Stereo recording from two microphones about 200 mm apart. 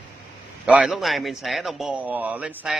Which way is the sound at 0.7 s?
5° right (ahead or behind).